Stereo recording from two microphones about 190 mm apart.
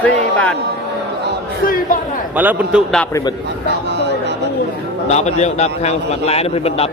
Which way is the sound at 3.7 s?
65° right (ahead or behind).